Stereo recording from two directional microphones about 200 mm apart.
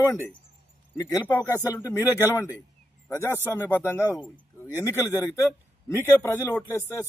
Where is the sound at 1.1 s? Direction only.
15° left (ahead or behind).